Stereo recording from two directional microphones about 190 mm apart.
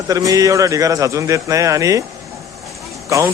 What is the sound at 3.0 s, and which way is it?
Speech, 15° right (ahead or behind).